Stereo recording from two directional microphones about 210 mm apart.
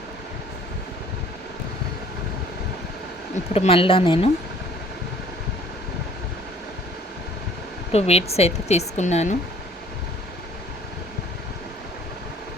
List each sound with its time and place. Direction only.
3.5 s a woman's voice: 25° left (ahead or behind)
7.9 s speech: 30° left (ahead or behind)